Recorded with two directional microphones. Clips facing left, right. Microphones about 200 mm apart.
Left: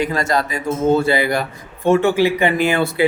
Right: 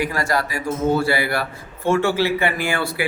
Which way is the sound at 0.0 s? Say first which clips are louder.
Left 3 dB; 20° left (ahead or behind).